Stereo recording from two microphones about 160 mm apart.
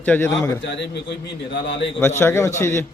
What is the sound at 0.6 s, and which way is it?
Speech, 90° left.